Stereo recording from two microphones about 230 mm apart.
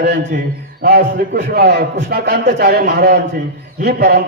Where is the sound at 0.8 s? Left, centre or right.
Right.